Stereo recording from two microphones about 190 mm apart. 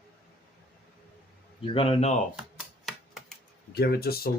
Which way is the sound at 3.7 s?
55° left (ahead or behind).